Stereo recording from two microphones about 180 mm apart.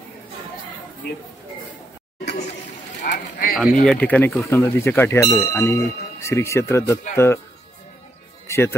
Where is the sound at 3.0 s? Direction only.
50° left (ahead or behind).